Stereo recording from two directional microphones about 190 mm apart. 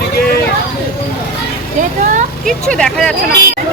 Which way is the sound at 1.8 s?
40° right (ahead or behind).